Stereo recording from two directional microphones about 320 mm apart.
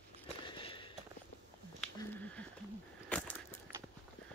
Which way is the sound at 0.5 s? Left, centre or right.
Centre.